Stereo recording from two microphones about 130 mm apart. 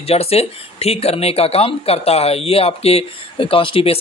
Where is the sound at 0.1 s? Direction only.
50° left (ahead or behind).